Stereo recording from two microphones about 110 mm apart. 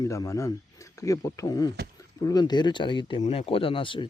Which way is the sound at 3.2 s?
70° left (ahead or behind).